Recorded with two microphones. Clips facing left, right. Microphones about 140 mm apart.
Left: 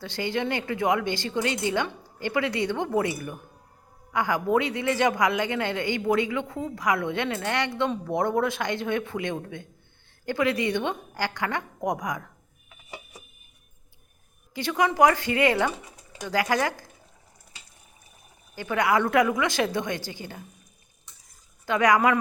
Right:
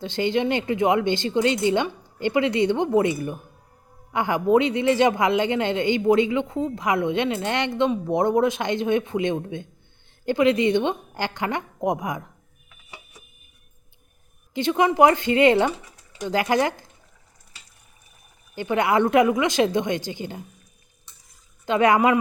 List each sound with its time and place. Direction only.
0.0 s a man's voice: 20° right (ahead or behind)
14.5 s a man's voice: 25° right (ahead or behind)
18.5 s a man's voice: 20° right (ahead or behind)
21.7 s a man's voice: 25° right (ahead or behind)